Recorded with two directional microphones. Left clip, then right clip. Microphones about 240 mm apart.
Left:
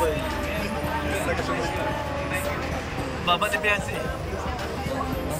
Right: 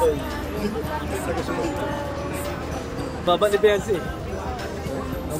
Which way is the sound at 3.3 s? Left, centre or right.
Right.